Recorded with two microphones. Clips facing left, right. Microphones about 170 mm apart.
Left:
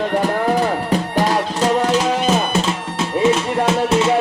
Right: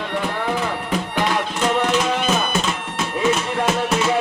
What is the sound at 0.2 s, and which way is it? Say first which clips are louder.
Music: left 4 dB; 40° left (ahead or behind).